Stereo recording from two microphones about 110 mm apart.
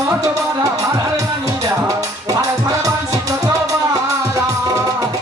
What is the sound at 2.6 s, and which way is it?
Music, 30° right (ahead or behind).